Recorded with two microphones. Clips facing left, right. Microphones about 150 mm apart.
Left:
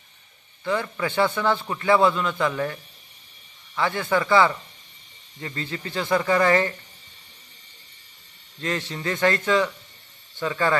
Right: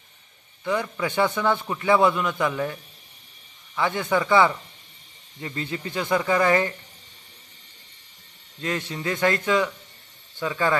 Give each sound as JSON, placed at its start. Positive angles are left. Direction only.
{"t": 0.6, "sound": "speech", "side_deg": -15}
{"t": 3.8, "sound": "speech", "side_deg": -15}
{"t": 8.6, "sound": "speech", "side_deg": -10}